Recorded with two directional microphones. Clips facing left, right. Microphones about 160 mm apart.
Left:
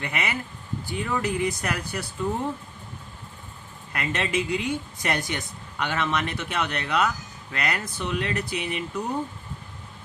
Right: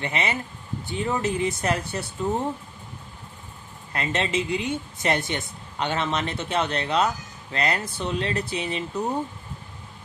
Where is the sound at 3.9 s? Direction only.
25° right (ahead or behind).